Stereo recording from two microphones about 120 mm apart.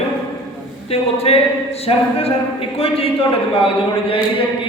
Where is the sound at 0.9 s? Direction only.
55° left (ahead or behind).